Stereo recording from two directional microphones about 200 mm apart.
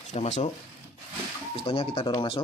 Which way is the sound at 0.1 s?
35° left (ahead or behind).